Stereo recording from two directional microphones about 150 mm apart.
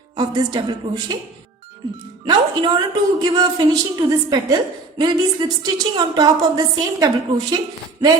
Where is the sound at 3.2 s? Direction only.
25° right (ahead or behind).